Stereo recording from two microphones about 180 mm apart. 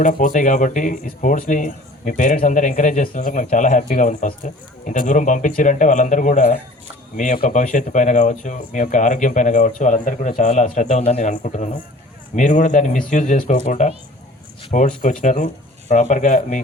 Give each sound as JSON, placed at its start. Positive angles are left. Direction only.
{"t": 0.0, "sound": "speech", "side_deg": 45}